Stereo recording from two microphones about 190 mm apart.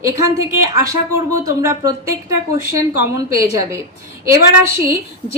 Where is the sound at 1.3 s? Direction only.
15° right (ahead or behind).